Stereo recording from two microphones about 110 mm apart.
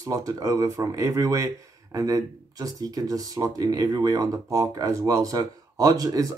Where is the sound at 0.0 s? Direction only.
30° right (ahead or behind).